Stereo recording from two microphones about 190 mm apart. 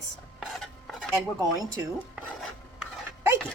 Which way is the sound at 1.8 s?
10° right (ahead or behind).